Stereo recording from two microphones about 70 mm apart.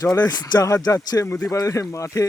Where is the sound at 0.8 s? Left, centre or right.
Left.